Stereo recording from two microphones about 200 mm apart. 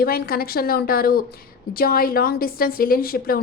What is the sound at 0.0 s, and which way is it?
A woman's voice, 50° left (ahead or behind).